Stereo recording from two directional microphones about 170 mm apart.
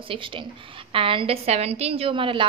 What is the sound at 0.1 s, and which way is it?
A woman's voice, 30° right (ahead or behind).